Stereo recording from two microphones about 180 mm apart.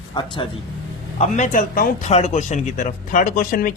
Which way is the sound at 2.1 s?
40° left (ahead or behind).